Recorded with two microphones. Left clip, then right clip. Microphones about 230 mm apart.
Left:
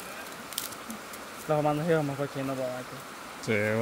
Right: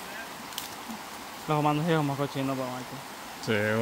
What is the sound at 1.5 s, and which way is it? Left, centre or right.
Speech, right.